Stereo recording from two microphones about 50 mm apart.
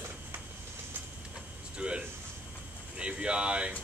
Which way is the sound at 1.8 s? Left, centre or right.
Right.